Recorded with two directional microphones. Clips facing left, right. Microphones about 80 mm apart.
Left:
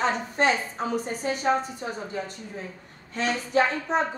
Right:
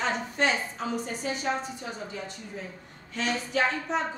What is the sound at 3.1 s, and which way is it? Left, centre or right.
Speech, left.